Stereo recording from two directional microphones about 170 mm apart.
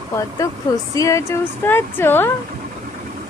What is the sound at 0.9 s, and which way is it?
Speech, 20° left (ahead or behind).